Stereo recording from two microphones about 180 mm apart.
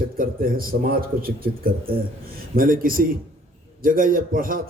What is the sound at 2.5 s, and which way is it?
A man's voice, 50° right (ahead or behind).